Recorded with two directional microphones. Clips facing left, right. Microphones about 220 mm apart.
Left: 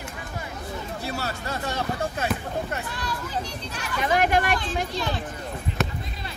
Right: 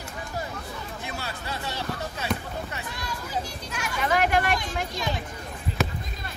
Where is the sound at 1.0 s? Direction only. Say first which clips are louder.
Left 5 dB; 40° left (ahead or behind).